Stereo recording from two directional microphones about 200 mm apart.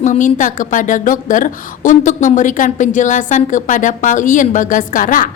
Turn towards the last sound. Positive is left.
turn(degrees=40)  # may be behind; listen again after turning